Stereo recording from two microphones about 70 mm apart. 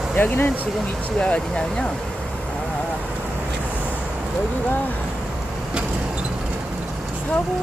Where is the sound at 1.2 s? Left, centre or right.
Centre.